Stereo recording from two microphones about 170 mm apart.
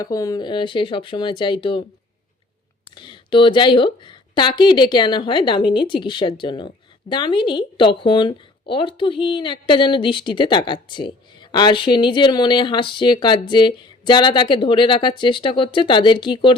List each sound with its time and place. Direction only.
0.0 s speech: 20° left (ahead or behind)
2.9 s speech: 30° left (ahead or behind)